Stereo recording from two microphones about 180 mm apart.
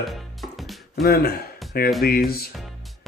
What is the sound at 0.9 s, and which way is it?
Speech, 60° left (ahead or behind).